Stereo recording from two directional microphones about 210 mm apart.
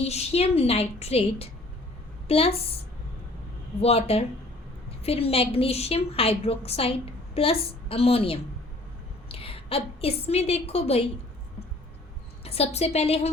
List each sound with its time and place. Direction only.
0.0 s a woman's voice: 30° left (ahead or behind)
3.8 s a woman's voice: 30° left (ahead or behind)
12.5 s a woman's voice: 30° left (ahead or behind)